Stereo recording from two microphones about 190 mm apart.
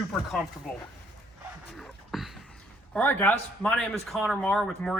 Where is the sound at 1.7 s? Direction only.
Centre (ahead or behind).